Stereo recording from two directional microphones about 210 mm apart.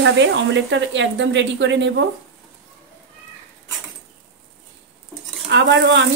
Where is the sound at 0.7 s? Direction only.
60° right (ahead or behind).